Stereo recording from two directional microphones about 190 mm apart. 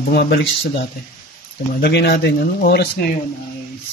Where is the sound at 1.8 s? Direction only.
55° left (ahead or behind).